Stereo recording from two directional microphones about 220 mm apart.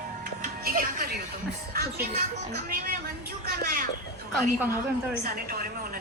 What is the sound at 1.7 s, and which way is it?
A woman's voice, 40° right (ahead or behind).